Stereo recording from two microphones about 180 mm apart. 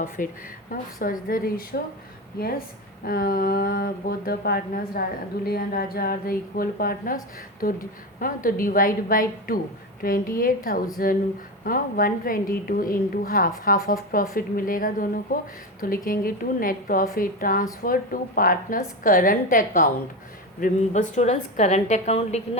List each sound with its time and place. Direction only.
0.2 s a woman's voice: 50° left (ahead or behind)
3.1 s speech: 55° left (ahead or behind)
8.2 s a woman's voice: 50° left (ahead or behind); by 22.4 s 35° left (ahead or behind)